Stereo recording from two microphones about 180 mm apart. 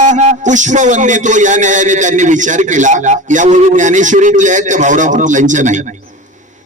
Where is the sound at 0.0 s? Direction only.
40° right (ahead or behind).